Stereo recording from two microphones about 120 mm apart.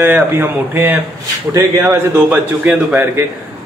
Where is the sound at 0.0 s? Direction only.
15° right (ahead or behind).